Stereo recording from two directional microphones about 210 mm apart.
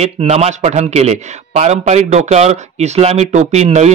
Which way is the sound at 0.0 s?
30° right (ahead or behind).